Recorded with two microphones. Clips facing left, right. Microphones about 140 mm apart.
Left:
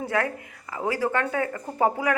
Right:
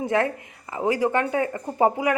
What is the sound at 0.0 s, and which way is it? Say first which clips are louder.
Speech: right 4 dB; 20° right (ahead or behind).